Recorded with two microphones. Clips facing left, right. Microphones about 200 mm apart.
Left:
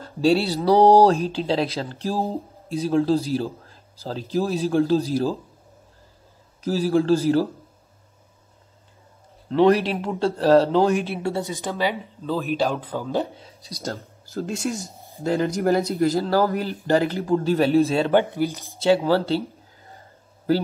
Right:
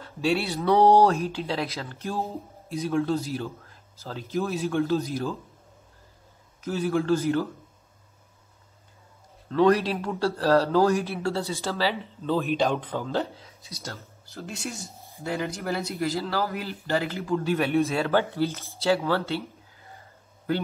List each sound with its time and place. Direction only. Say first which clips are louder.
0.0 s speech: left 6 dB; 35° left (ahead or behind)
6.6 s speech: left 5 dB; 30° left (ahead or behind)
9.5 s a man's voice: left 3 dB; 25° left (ahead or behind)
12.0 s speech: even; 5° left (ahead or behind)
13.4 s speech: left 5 dB; 30° left (ahead or behind)
14.8 s a sound: left 5 dB; centre (ahead or behind)
15.2 s speech: left 9 dB; 35° left (ahead or behind)